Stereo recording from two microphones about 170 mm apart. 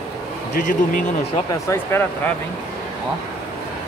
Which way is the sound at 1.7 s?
10° left (ahead or behind).